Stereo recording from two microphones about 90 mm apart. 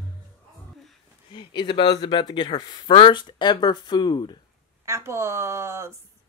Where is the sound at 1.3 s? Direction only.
65° left (ahead or behind).